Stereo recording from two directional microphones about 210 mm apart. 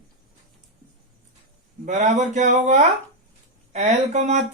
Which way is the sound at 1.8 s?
35° right (ahead or behind).